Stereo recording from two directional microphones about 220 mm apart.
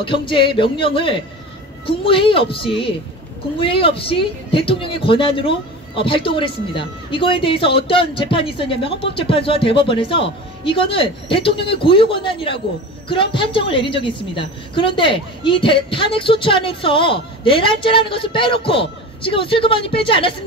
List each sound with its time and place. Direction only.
0.0 s speech: 20° left (ahead or behind)